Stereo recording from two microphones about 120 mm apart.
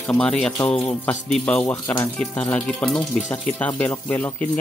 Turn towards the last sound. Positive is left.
turn(degrees=15)  # may be behind; listen again after turning